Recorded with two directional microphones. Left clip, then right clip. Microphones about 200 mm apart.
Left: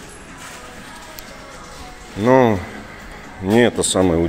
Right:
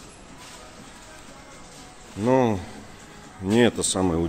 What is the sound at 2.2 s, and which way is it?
Speech, 25° right (ahead or behind).